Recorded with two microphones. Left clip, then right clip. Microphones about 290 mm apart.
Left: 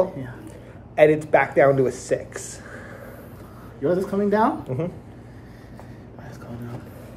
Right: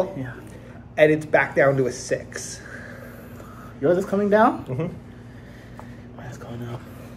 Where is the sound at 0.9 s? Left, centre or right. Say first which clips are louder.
Left 1 dB; centre.